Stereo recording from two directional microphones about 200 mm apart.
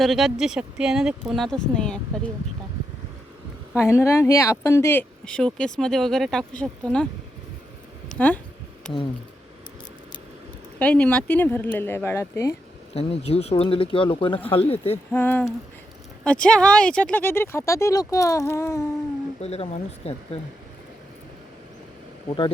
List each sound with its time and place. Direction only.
0.0 s speech: centre (ahead or behind)
3.8 s speech: 15° left (ahead or behind)
10.8 s speech: 5° left (ahead or behind)
12.9 s speech: 30° left (ahead or behind)
15.1 s speech: 10° left (ahead or behind)
19.4 s speech: 30° left (ahead or behind)
22.3 s speech: 30° left (ahead or behind)